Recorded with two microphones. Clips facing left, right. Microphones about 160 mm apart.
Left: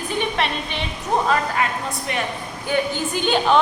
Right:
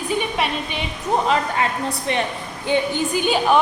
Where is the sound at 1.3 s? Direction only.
25° right (ahead or behind).